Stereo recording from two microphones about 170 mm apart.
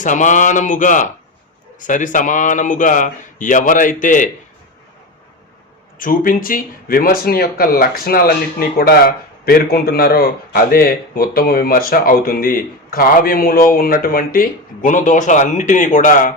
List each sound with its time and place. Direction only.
0.0 s speech: 50° left (ahead or behind)
6.0 s speech: 55° left (ahead or behind)